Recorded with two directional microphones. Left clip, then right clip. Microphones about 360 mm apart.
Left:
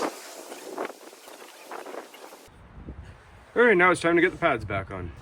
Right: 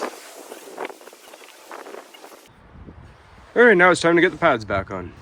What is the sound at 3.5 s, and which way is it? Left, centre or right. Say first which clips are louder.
Speech: right 6 dB; centre.